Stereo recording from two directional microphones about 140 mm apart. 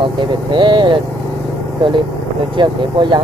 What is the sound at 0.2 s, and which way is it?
Speech, 35° right (ahead or behind).